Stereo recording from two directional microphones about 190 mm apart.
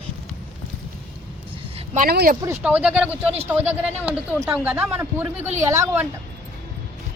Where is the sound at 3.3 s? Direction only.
35° right (ahead or behind).